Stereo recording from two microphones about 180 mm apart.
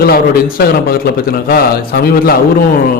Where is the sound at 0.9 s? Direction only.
55° left (ahead or behind).